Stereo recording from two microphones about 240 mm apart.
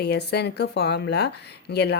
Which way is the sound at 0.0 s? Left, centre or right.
Left.